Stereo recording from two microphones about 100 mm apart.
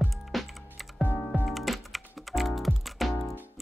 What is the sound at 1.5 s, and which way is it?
Typing, centre (ahead or behind).